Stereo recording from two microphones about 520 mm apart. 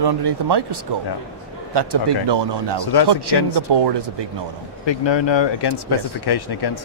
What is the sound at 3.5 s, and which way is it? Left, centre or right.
Speech, right.